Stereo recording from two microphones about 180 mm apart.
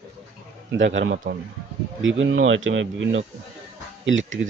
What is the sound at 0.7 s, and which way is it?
A man's voice, 90° right.